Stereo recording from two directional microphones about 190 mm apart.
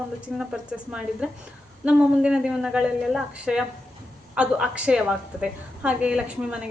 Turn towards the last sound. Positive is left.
turn(degrees=-5)  # may be behind; listen again after turning